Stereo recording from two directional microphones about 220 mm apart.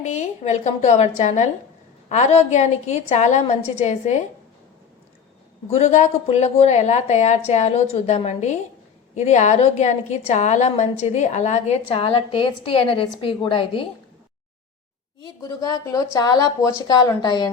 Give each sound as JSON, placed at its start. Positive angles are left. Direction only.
{"t": 0.0, "sound": "a woman's voice", "side_deg": 30}
{"t": 5.7, "sound": "a woman's voice", "side_deg": 30}
{"t": 15.2, "sound": "a woman's voice", "side_deg": 15}